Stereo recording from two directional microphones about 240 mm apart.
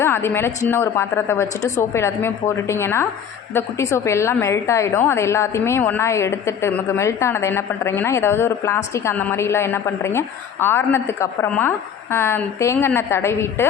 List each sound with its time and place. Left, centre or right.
0.0 s a woman's voice: centre